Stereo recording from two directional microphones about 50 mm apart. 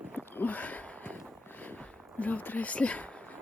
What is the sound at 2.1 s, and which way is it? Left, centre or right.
Speech, left.